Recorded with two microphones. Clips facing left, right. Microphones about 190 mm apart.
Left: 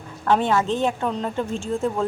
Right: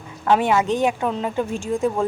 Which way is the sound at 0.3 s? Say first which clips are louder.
Right 2 dB; 10° right (ahead or behind).